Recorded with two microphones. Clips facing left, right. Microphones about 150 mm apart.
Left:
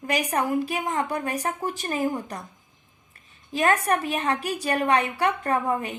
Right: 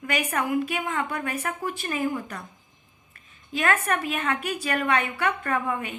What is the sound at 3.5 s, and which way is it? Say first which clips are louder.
A woman's voice: left 3 dB; 35° left (ahead or behind).